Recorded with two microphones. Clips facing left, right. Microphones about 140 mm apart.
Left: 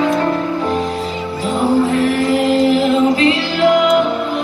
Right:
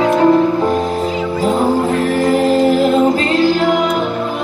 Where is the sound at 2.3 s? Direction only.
45° right (ahead or behind).